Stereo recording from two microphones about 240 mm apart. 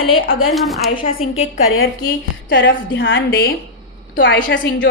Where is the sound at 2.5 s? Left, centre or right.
Left.